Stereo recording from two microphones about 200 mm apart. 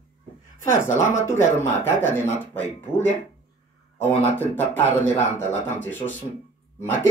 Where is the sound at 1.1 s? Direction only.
15° left (ahead or behind).